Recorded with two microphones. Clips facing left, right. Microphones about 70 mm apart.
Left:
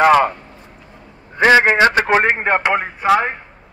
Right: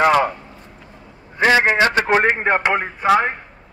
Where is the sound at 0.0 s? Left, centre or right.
Left.